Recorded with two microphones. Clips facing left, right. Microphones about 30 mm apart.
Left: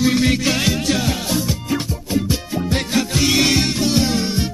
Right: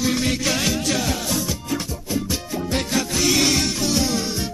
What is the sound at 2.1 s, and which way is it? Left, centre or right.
Music, left.